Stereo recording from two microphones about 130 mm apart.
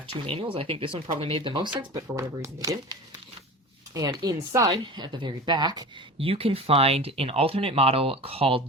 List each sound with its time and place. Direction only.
0.5 s speech: 45° right (ahead or behind)
2.1 s speech: 25° right (ahead or behind)
3.9 s speech: 30° right (ahead or behind)
6.1 s speech: 50° right (ahead or behind)